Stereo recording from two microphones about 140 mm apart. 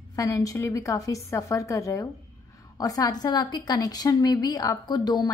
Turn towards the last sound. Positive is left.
turn(degrees=30)  # may be behind; listen again after turning